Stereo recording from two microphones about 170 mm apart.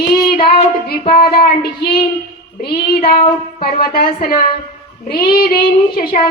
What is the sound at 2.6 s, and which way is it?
Child singing, 65° left (ahead or behind).